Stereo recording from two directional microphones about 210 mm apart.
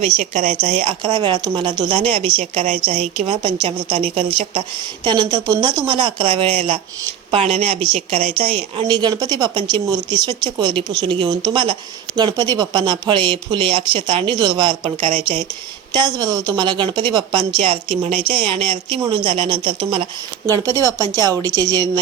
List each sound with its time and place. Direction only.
0.2 s a woman's voice: 35° right (ahead or behind); by 21.8 s 20° right (ahead or behind)